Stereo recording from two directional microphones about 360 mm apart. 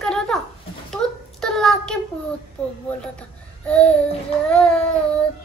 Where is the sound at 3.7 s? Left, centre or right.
Centre.